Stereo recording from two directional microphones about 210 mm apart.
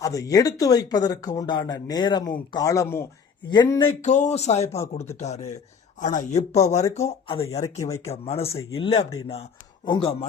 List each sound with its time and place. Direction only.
0.0 s speech: 15° left (ahead or behind)
4.0 s speech: 35° left (ahead or behind)
7.6 s speech: 15° left (ahead or behind)
8.0 s speech: 30° left (ahead or behind)
8.4 s speech: 10° left (ahead or behind)
8.7 s speech: 25° left (ahead or behind)